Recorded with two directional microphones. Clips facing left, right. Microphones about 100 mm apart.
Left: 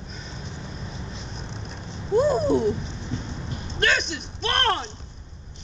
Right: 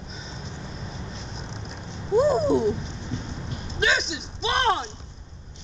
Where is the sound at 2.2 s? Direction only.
5° right (ahead or behind).